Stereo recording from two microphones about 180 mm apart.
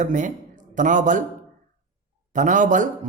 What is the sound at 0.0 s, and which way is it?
Speech, 45° right (ahead or behind).